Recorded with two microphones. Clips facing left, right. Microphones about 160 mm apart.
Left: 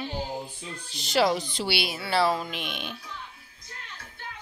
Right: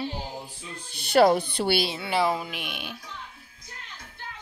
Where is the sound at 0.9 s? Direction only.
55° right (ahead or behind).